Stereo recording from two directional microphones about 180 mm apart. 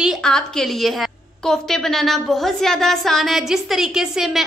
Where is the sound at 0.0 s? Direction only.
Centre (ahead or behind).